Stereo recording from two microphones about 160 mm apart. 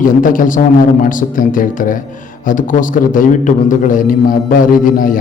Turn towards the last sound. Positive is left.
turn(degrees=60)  # may be behind; listen again after turning